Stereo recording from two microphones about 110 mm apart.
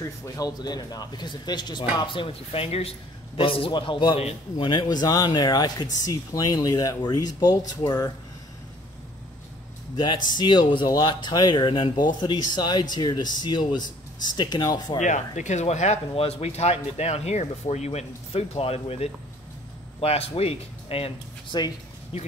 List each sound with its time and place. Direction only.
0.0 s a man's voice: 30° left (ahead or behind)
9.9 s speech: 40° left (ahead or behind)
15.0 s speech: 90° left; by 21.1 s 65° left (ahead or behind)
21.5 s speech: 40° left (ahead or behind)
22.1 s speech: 65° left (ahead or behind)